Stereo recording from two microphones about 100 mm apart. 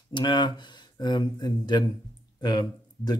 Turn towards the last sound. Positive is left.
turn(degrees=40)  # may be behind; listen again after turning